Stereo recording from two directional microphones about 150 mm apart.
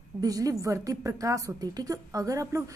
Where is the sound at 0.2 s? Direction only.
25° right (ahead or behind).